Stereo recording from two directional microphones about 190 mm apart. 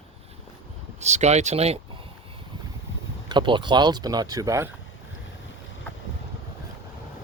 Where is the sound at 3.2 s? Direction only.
25° right (ahead or behind).